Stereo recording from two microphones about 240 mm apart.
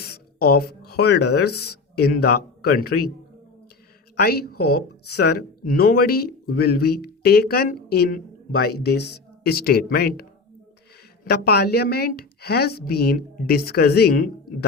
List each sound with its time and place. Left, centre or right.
0.0 s a sound: left
0.9 s speech: left
4.2 s speech: left
11.3 s speech: left